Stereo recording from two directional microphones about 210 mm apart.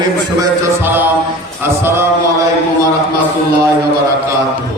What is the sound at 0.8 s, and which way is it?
Music, 10° right (ahead or behind).